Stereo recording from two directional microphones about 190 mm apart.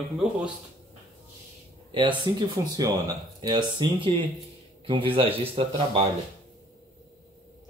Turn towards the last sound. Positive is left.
turn(degrees=-30)  # may be behind; listen again after turning